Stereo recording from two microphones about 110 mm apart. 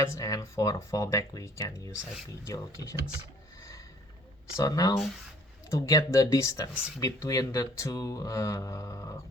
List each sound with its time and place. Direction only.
0.0 s speech: 30° left (ahead or behind)
4.5 s speech: 30° left (ahead or behind)